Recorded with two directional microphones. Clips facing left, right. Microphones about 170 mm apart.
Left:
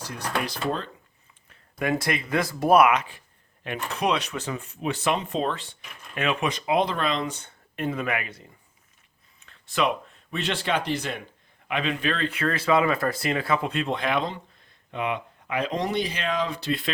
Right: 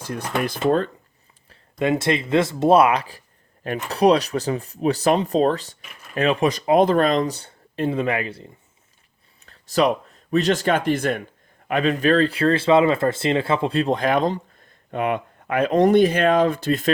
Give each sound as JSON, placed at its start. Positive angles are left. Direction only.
{"t": 0.0, "sound": "speech", "side_deg": -50}
{"t": 1.8, "sound": "speech", "side_deg": -25}
{"t": 9.5, "sound": "speech", "side_deg": -40}